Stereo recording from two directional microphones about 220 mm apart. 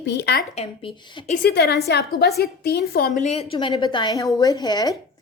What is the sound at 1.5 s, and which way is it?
A woman's voice, 45° left (ahead or behind).